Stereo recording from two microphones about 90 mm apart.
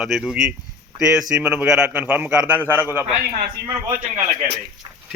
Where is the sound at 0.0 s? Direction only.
5° right (ahead or behind).